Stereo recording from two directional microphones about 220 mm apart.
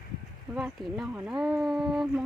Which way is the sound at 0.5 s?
5° right (ahead or behind).